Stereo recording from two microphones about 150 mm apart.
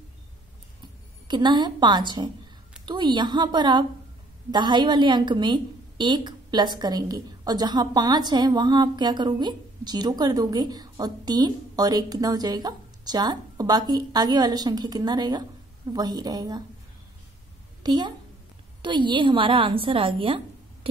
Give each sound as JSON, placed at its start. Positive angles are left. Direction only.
{"t": 1.2, "sound": "a woman's voice", "side_deg": -30}
{"t": 17.8, "sound": "a woman's voice", "side_deg": -30}
{"t": 20.9, "sound": "a sound", "side_deg": -40}